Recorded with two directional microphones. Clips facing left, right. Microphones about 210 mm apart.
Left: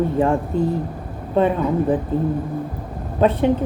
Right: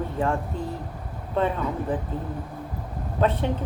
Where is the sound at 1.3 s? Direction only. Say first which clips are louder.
Left 7 dB; 15° left (ahead or behind).